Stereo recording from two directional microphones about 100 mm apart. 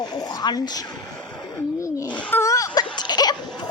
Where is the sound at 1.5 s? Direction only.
35° left (ahead or behind).